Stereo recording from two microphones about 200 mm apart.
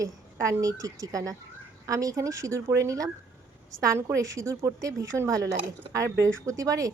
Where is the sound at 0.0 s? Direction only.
15° right (ahead or behind).